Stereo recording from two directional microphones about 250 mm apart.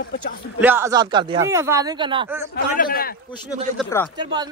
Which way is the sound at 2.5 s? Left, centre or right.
Left.